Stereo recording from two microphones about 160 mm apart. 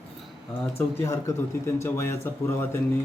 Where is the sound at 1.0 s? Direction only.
15° left (ahead or behind).